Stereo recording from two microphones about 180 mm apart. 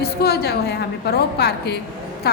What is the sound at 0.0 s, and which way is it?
A woman's voice, 65° left (ahead or behind).